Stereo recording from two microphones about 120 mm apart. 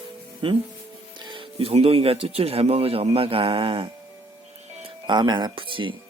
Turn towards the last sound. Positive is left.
turn(degrees=-45)  # may be behind; listen again after turning